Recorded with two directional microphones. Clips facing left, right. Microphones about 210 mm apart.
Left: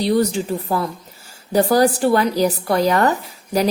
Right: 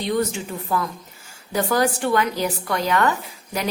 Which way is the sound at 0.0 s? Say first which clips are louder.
Left 5 dB; 35° left (ahead or behind).